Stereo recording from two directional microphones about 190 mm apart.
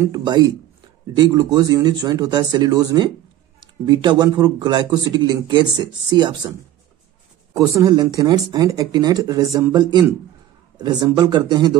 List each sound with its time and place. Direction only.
0.0 s a man's voice: 20° right (ahead or behind)
7.5 s a man's voice: 20° right (ahead or behind)